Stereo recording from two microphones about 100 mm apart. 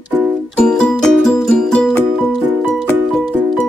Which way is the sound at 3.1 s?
5° left (ahead or behind).